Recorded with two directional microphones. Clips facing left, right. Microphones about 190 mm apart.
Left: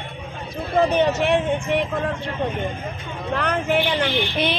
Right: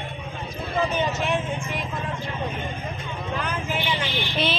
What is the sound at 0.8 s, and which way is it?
Speech, 65° left (ahead or behind).